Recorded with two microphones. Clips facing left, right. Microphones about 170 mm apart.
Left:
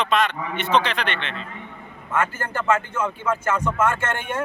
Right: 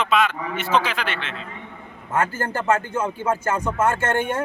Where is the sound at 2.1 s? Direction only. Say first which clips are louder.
Right 1 dB; 35° right (ahead or behind).